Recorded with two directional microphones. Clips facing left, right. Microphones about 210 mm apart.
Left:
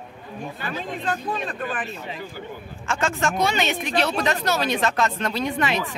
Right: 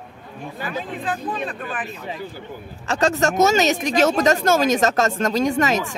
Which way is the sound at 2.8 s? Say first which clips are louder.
Right 5 dB; 40° right (ahead or behind).